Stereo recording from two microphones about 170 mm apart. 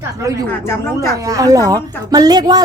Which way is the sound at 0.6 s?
15° left (ahead or behind).